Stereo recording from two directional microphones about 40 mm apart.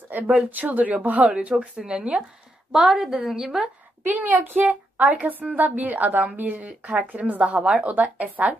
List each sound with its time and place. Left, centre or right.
0.1 s a sound: right
0.5 s a woman's voice: right
1.5 s speech: right
2.7 s a woman's voice: centre
4.0 s a woman's voice: right